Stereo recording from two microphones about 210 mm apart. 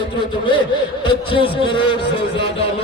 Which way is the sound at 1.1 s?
25° left (ahead or behind).